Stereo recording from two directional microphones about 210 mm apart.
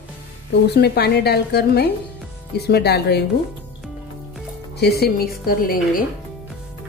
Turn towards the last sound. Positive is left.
turn(degrees=45)  # may be behind; listen again after turning